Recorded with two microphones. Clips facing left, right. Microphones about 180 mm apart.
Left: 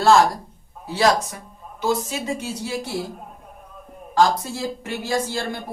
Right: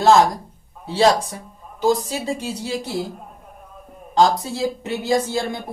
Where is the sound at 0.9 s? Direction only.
30° right (ahead or behind).